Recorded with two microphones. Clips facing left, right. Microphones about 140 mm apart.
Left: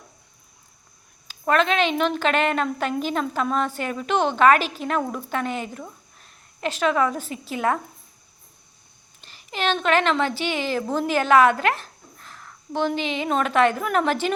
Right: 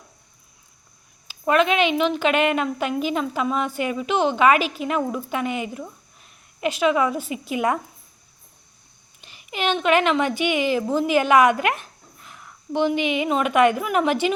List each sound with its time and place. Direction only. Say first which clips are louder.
1.3 s a woman's voice: right 2 dB; 10° right (ahead or behind)
9.5 s a woman's voice: right 2 dB; 10° right (ahead or behind)
12.2 s a sound: right 2 dB; 10° right (ahead or behind)
13.1 s a woman's voice: right 2 dB; 10° right (ahead or behind)